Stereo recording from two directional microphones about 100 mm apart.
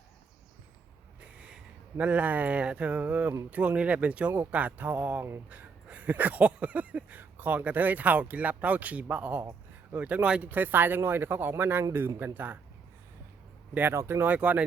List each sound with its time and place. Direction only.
1.2 s a sound: 10° right (ahead or behind)
10.0 s speech: 10° right (ahead or behind)
13.7 s speech: 25° right (ahead or behind)